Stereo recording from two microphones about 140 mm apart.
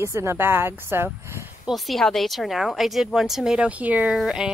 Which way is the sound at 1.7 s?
Centre (ahead or behind).